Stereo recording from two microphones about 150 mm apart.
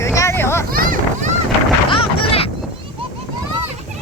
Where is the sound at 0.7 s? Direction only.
70° right (ahead or behind).